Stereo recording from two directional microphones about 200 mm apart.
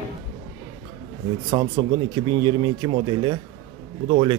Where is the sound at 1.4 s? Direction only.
20° right (ahead or behind).